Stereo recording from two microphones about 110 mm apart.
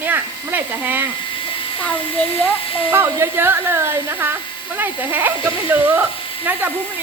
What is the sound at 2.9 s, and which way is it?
Speech, 20° right (ahead or behind).